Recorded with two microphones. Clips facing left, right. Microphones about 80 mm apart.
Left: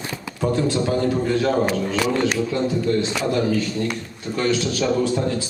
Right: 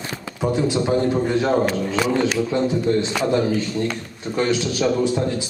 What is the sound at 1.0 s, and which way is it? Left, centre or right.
A man's voice, right.